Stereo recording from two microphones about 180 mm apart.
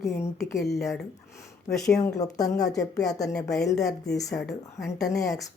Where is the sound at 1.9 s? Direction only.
20° left (ahead or behind).